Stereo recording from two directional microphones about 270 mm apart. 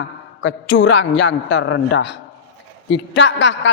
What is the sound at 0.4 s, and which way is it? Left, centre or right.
A woman's voice, left.